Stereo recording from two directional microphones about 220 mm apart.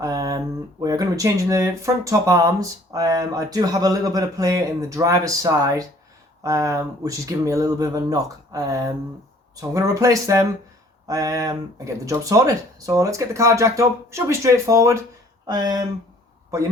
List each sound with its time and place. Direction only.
0.0 s speech: 15° right (ahead or behind)